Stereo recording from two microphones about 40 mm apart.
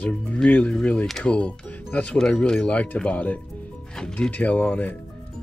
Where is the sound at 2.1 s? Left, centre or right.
Centre.